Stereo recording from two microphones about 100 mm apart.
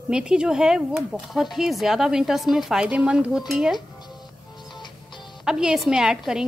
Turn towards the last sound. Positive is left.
turn(degrees=-5)  # may be behind; listen again after turning